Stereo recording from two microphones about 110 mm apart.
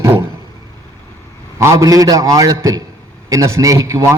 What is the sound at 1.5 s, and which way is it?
A man's voice, 30° right (ahead or behind).